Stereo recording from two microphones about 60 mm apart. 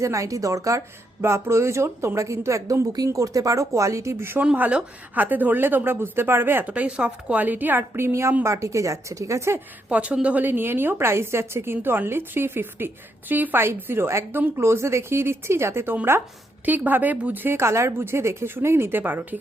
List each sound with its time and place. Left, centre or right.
0.0 s speech: right
1.2 s a woman's voice: right
4.7 s a woman's voice: right
6.7 s a woman's voice: right
9.9 s a woman's voice: right
14.3 s speech: right
16.6 s a woman's voice: right